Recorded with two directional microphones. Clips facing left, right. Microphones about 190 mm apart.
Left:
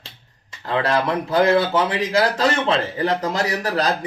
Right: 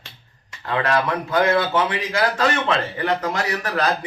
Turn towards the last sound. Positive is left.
turn(degrees=35)  # may be behind; listen again after turning